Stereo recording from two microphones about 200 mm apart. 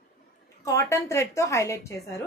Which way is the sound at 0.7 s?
15° left (ahead or behind).